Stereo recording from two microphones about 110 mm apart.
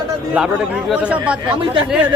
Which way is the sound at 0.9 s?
10° right (ahead or behind).